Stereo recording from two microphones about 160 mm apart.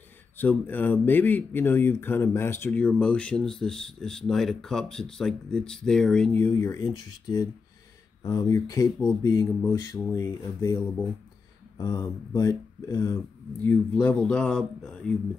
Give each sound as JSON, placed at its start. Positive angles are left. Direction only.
{"t": 0.4, "sound": "speech", "side_deg": 10}
{"t": 8.2, "sound": "a sound", "side_deg": 20}
{"t": 11.8, "sound": "speech", "side_deg": 25}